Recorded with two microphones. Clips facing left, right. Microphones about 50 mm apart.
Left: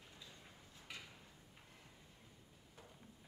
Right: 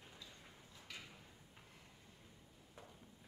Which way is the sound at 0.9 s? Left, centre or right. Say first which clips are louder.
Left 1 dB; left.